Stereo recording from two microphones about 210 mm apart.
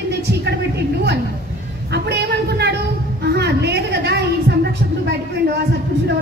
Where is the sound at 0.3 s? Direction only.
55° right (ahead or behind).